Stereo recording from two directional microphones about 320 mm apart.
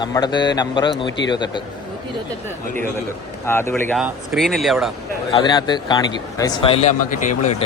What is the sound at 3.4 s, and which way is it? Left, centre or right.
Speech, centre.